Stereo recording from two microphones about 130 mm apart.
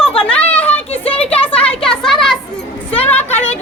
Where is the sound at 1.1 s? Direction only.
50° left (ahead or behind).